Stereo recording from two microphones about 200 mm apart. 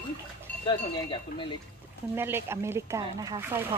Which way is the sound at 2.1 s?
10° right (ahead or behind).